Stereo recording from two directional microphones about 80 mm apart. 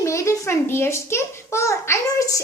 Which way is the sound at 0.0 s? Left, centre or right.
Left.